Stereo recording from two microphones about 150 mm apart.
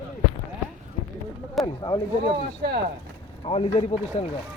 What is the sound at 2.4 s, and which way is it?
Speech, 90° right.